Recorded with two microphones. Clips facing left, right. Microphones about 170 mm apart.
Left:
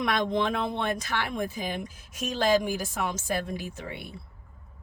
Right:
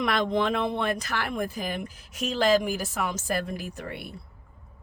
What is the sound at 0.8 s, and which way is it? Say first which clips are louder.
Speech: right 1 dB; 60° right (ahead or behind).